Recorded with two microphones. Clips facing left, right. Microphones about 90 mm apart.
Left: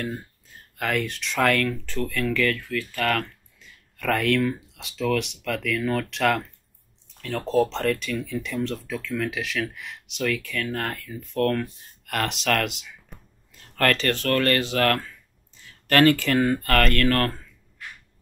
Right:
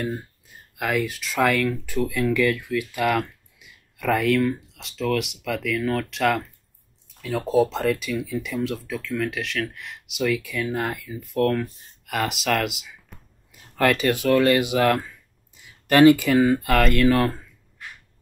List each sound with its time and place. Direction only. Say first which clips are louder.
0.7 s speech: right 2 dB; 5° right (ahead or behind)